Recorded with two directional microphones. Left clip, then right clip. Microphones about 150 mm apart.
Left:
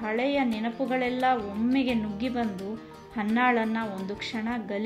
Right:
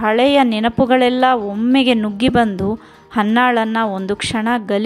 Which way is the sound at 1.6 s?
50° right (ahead or behind).